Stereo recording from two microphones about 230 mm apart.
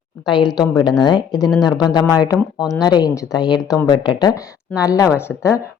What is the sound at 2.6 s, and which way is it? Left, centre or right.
Speech, centre.